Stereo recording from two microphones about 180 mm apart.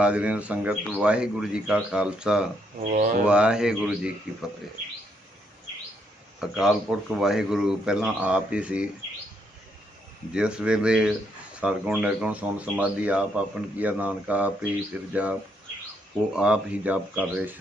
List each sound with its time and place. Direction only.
0.0 s speech: 5° right (ahead or behind)
2.9 s speech: 45° right (ahead or behind)
3.2 s speech: 5° right (ahead or behind)
6.4 s speech: 5° right (ahead or behind)
10.3 s speech: 5° right (ahead or behind)